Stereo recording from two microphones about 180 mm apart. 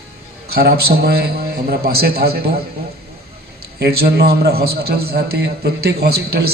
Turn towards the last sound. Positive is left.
turn(degrees=-60)  # may be behind; listen again after turning